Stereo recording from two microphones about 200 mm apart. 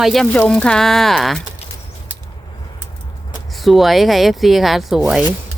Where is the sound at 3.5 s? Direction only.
Centre (ahead or behind).